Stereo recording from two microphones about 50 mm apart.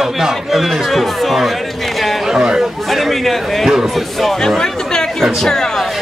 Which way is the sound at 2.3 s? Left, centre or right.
Centre.